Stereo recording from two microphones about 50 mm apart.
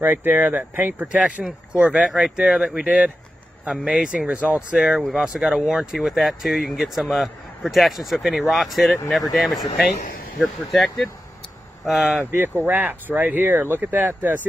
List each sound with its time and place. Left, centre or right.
0.0 s speech: right
1.7 s speech: right
2.6 s speech: right; by 12.2 s centre
12.3 s speech: right